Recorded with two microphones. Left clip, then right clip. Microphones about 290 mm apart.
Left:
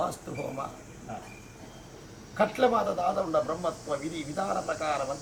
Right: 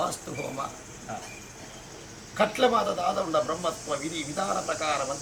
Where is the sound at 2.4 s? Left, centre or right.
Centre.